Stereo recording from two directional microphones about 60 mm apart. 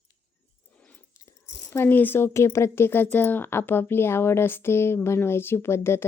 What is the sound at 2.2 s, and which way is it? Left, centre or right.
Speech, left.